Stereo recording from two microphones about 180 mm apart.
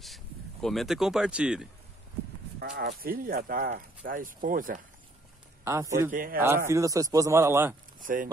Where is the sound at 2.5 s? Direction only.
65° right (ahead or behind).